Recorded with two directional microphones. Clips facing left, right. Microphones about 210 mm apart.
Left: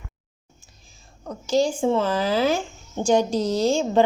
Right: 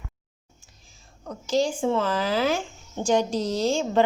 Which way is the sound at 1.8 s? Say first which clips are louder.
Left 3 dB; 30° left (ahead or behind).